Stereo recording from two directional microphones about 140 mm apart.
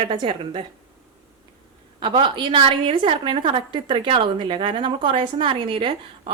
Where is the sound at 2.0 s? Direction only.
35° right (ahead or behind).